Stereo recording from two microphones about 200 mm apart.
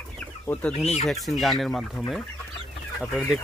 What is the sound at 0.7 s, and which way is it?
Speech, 30° left (ahead or behind).